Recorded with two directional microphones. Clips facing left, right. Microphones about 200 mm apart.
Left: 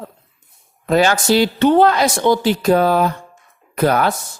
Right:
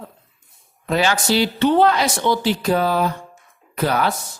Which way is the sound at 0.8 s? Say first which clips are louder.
Left 5 dB; 45° left (ahead or behind).